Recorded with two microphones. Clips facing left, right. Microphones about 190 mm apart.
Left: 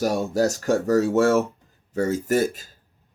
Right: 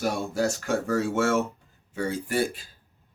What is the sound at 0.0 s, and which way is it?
Speech, 40° left (ahead or behind).